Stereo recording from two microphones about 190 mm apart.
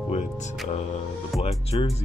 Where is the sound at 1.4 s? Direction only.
30° left (ahead or behind).